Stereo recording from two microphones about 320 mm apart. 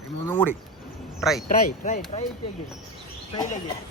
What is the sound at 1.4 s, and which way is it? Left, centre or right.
Speech, left.